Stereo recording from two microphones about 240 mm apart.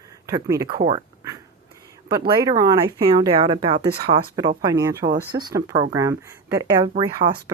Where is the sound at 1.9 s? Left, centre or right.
Centre.